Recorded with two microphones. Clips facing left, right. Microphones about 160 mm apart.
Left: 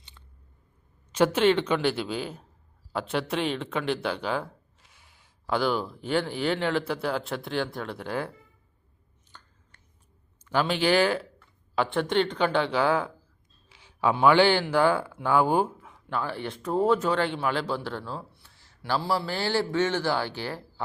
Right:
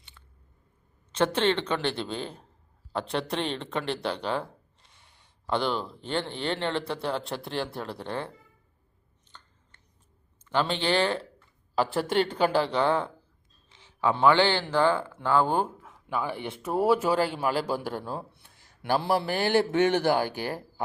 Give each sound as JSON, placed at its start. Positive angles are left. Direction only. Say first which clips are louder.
{"t": 0.2, "sound": "biting", "louder": "left 1 dB", "side_deg": 20}
{"t": 1.1, "sound": "a man's voice", "louder": "left 3 dB", "side_deg": 10}
{"t": 10.8, "sound": "a man's voice", "louder": "left 3 dB", "side_deg": 10}
{"t": 16.0, "sound": "a man's voice", "louder": "even", "side_deg": -10}
{"t": 20.1, "sound": "speech", "louder": "right 2 dB", "side_deg": -50}